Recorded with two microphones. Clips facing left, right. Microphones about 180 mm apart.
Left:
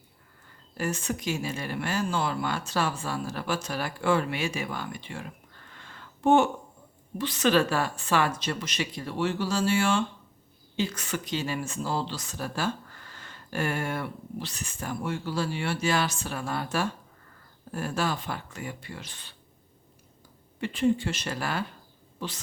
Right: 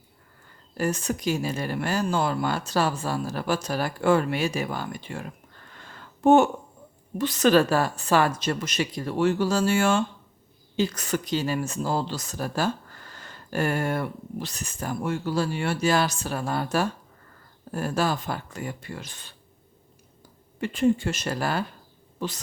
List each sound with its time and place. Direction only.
0.8 s speech: 40° right (ahead or behind)
5.8 s a sound: 45° right (ahead or behind)
7.2 s a woman's voice: 40° right (ahead or behind)
20.6 s a woman's voice: 45° right (ahead or behind)